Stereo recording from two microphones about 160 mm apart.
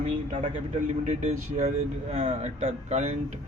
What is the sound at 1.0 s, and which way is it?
A man's voice, 45° right (ahead or behind).